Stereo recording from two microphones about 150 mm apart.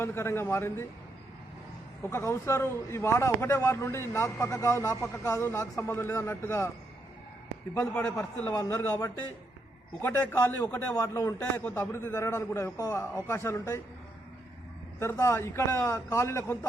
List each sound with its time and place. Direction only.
0.0 s a man's voice: 15° left (ahead or behind)
2.0 s a man's voice: 15° left (ahead or behind)
7.7 s a man's voice: 15° left (ahead or behind)
14.9 s a man's voice: 20° left (ahead or behind)